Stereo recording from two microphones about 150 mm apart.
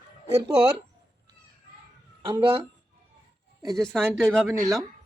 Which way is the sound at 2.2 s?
35° right (ahead or behind).